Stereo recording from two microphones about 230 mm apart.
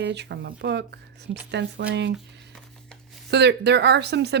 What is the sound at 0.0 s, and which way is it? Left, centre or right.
Speech, right.